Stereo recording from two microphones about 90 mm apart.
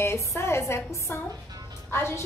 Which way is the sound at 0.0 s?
30° left (ahead or behind).